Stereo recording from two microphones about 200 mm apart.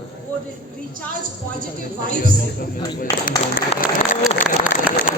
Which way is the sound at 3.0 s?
45° left (ahead or behind).